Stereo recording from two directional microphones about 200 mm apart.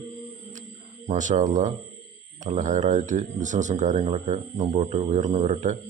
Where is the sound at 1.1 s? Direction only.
35° right (ahead or behind).